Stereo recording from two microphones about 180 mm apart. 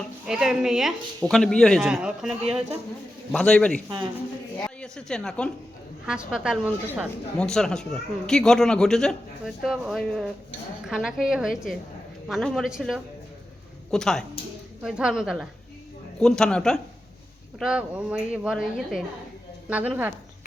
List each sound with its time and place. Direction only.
0.3 s a man's voice: centre (ahead or behind)
3.8 s speech: 25° right (ahead or behind)
4.5 s a woman's voice: 5° left (ahead or behind)